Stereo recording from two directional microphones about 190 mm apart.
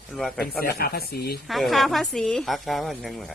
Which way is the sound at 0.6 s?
55° left (ahead or behind).